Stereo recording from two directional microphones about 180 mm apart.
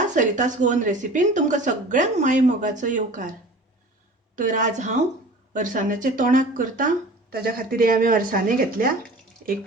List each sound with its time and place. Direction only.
0.1 s speech: 45° right (ahead or behind)
4.4 s speech: 45° right (ahead or behind)